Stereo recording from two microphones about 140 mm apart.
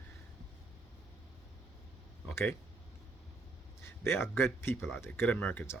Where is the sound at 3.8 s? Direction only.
20° left (ahead or behind).